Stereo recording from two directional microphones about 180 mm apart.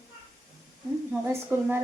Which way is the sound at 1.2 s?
10° right (ahead or behind).